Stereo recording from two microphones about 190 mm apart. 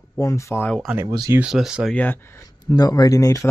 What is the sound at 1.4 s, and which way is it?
Speech, 5° right (ahead or behind).